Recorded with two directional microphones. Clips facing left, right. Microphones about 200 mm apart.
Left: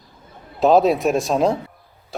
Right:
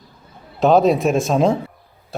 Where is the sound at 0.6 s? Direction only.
Centre (ahead or behind).